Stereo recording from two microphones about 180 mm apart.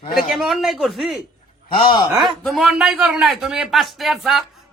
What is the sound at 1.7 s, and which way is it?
Speech, 30° left (ahead or behind).